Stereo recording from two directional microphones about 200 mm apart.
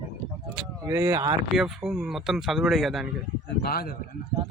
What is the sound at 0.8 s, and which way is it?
Speech, 15° right (ahead or behind).